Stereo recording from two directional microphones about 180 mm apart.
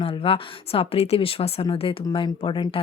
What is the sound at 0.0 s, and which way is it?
Speech, 30° left (ahead or behind).